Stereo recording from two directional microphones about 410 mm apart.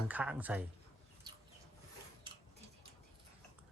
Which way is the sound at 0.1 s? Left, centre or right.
Centre.